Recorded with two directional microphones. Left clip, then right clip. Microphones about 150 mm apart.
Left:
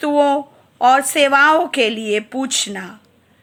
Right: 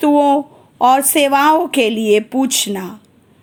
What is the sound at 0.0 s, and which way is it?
A woman's voice, 20° right (ahead or behind).